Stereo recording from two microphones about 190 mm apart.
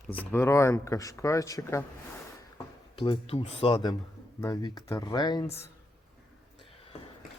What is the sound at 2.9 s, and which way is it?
Speech, 25° left (ahead or behind).